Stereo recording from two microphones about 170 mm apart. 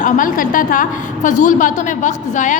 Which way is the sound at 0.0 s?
50° left (ahead or behind).